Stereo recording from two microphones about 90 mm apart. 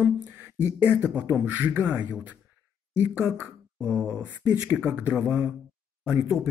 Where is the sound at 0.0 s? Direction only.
20° right (ahead or behind).